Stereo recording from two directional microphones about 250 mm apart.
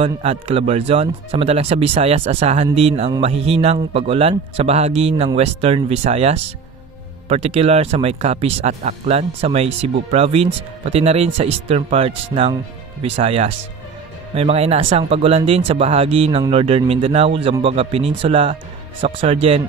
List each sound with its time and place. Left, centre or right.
0.0 s speech: right
13.1 s speech: right